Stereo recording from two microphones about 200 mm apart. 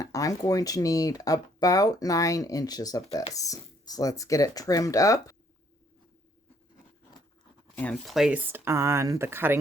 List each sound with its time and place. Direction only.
0.0 s speech: 15° left (ahead or behind)
7.8 s speech: 5° left (ahead or behind)